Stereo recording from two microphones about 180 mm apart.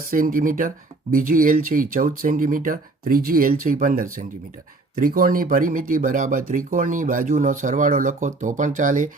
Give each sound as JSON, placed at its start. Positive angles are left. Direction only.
{"t": 0.1, "sound": "speech", "side_deg": -50}